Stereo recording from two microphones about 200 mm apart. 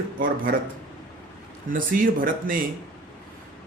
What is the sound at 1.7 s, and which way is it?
Speech, 45° right (ahead or behind).